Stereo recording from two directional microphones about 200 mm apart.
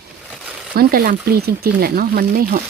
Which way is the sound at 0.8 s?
50° right (ahead or behind).